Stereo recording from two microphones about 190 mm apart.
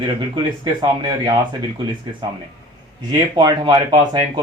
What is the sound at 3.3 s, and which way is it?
Speech, 20° right (ahead or behind).